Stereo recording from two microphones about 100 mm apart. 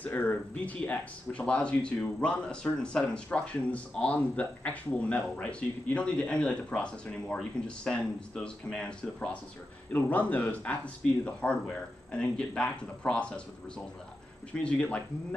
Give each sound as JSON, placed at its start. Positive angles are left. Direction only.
{"t": 0.0, "sound": "speech", "side_deg": 15}
{"t": 14.5, "sound": "speech", "side_deg": 10}